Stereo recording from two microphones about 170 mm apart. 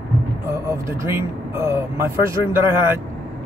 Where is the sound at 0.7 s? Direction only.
15° right (ahead or behind).